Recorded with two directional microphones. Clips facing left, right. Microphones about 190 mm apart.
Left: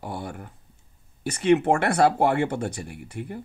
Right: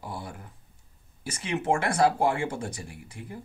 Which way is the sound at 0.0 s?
65° left (ahead or behind).